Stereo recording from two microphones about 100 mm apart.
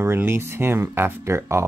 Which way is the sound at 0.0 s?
25° right (ahead or behind).